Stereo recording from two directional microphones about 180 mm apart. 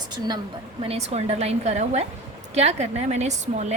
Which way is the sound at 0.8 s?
35° right (ahead or behind).